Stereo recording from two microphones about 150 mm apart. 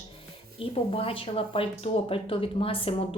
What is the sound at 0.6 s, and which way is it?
A woman's voice, 40° left (ahead or behind).